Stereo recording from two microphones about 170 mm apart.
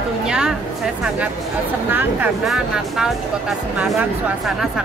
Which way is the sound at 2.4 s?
Centre (ahead or behind).